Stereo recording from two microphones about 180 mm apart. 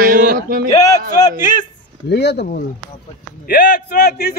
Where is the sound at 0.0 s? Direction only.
55° right (ahead or behind).